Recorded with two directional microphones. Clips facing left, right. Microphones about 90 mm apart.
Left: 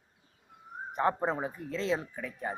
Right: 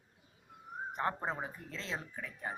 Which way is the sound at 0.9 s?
15° left (ahead or behind).